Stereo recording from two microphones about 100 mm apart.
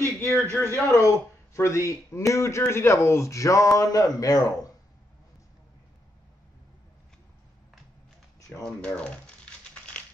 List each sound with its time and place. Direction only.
0.2 s speech: 25° left (ahead or behind)
8.6 s speech: 10° left (ahead or behind)